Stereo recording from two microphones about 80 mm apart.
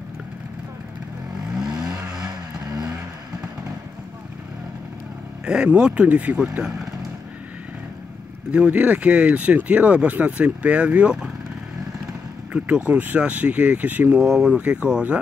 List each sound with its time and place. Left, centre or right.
1.5 s vehicle: centre
5.4 s speech: centre
8.5 s speech: centre
12.5 s speech: centre